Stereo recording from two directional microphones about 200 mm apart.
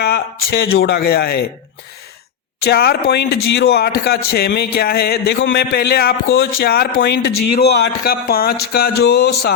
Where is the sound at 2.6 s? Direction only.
50° left (ahead or behind).